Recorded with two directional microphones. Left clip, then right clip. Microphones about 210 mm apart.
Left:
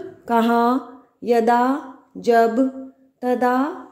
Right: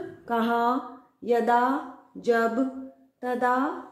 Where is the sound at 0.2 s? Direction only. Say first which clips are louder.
Left 7 dB; 40° left (ahead or behind).